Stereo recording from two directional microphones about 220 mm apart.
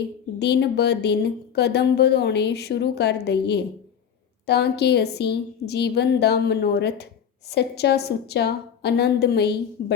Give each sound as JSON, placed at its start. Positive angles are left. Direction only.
{"t": 0.3, "sound": "speech", "side_deg": 50}